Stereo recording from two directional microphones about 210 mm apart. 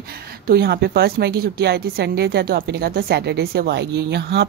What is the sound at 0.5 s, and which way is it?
A woman's voice, 50° right (ahead or behind).